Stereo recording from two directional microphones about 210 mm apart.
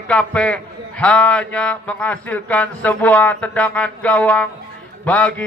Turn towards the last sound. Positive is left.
turn(degrees=5)  # may be behind; listen again after turning